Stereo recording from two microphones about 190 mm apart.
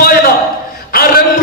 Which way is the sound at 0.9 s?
50° left (ahead or behind).